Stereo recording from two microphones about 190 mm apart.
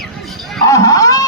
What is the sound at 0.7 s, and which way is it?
Dog, 15° left (ahead or behind).